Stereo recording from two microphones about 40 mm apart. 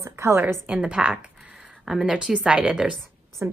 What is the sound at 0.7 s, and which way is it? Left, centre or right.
A woman's voice, right.